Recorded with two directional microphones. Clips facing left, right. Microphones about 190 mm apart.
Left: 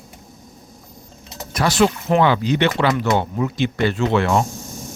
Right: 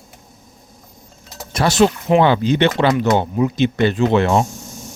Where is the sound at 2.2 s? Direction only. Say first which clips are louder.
Right 3 dB; 25° right (ahead or behind).